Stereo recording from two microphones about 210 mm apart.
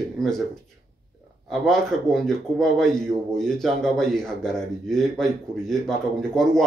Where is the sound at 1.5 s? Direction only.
Centre (ahead or behind).